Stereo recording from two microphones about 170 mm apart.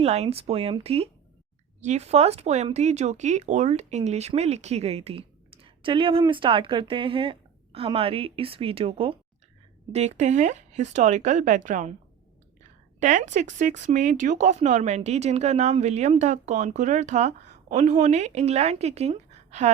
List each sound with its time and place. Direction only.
0.0 s speech: 40° right (ahead or behind)
13.0 s speech: 45° right (ahead or behind)